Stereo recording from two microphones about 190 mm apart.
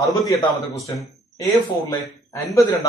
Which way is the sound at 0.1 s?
20° left (ahead or behind).